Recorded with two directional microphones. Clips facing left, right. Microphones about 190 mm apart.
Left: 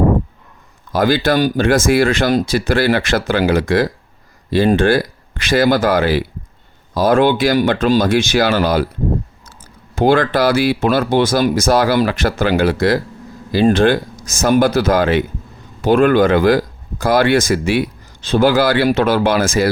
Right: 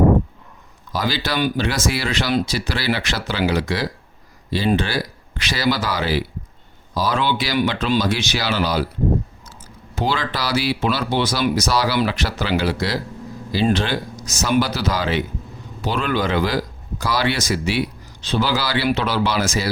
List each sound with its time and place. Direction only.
0.9 s speech: 50° left (ahead or behind)